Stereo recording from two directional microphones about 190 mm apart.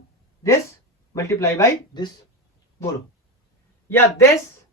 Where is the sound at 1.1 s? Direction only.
15° left (ahead or behind).